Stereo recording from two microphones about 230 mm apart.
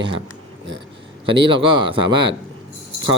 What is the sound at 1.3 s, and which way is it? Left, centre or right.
Speech, right.